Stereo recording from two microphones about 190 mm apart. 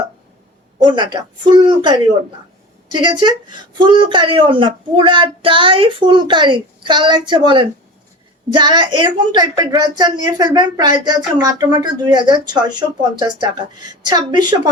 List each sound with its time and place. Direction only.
0.9 s speech: 25° right (ahead or behind)